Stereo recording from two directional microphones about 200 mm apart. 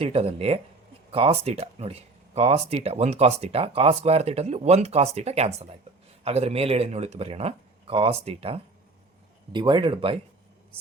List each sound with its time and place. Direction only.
0.0 s speech: 30° right (ahead or behind)